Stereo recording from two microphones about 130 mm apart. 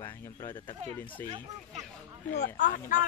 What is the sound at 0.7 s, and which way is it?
Speech, 15° left (ahead or behind).